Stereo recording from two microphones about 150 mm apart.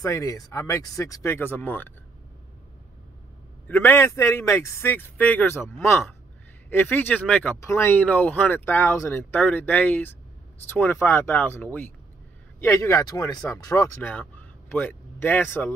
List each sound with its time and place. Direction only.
0.0 s speech: 25° left (ahead or behind)
3.6 s a man's voice: 10° left (ahead or behind)